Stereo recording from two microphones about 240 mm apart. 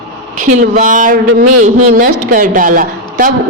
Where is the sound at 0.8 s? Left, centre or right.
Right.